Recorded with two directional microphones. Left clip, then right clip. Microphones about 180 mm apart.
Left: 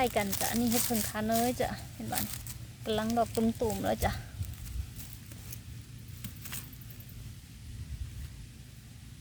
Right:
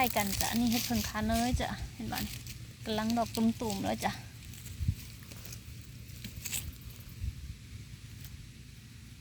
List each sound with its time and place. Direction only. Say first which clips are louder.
0.0 s speech: left 1 dB; 15° left (ahead or behind)